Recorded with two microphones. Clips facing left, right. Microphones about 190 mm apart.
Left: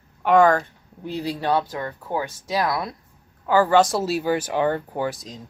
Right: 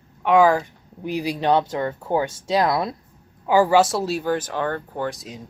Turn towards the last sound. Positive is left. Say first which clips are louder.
# left 1 dB
turn(degrees=5)  # may be behind; listen again after turning